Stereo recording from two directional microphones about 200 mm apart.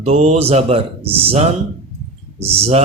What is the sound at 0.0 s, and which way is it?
Speech, 35° right (ahead or behind).